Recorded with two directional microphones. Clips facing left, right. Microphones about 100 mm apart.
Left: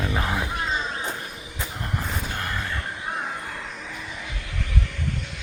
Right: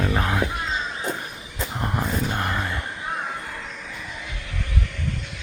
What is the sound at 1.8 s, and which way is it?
Vehicle, 30° right (ahead or behind).